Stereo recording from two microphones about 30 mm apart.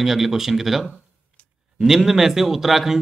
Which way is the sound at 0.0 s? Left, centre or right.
Centre.